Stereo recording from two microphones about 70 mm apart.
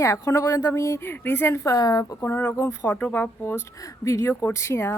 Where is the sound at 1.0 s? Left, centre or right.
Left.